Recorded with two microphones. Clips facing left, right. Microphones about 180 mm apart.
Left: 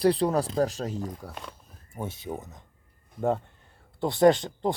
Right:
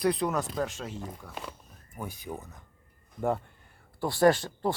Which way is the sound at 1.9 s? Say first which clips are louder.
Left 4 dB; 25° left (ahead or behind).